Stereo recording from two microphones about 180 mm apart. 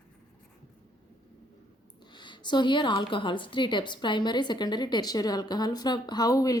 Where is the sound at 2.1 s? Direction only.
25° left (ahead or behind).